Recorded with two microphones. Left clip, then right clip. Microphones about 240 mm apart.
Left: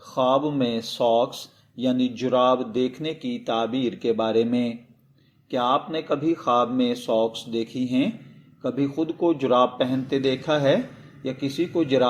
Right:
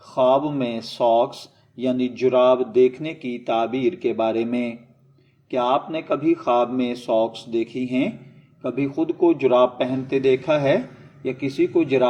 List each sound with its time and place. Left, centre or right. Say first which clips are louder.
0.1 s speech: right 3 dB; left